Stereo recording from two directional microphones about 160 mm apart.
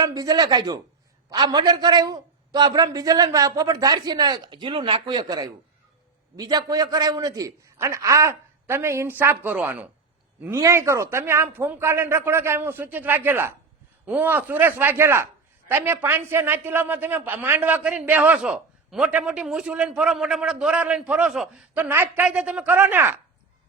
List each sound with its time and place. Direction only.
0.0 s a man's voice: 25° right (ahead or behind)